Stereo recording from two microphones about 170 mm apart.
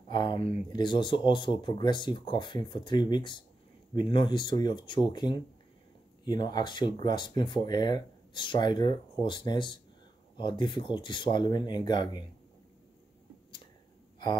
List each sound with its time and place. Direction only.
0.1 s speech: 25° left (ahead or behind)